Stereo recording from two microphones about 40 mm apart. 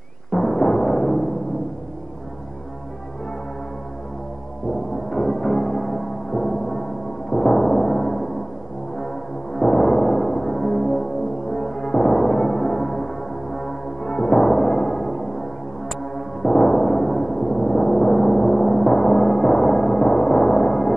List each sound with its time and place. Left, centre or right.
0.3 s timpani: centre
5.1 s music: centre